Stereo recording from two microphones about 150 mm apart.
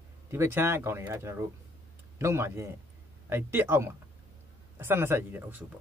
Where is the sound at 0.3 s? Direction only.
15° right (ahead or behind).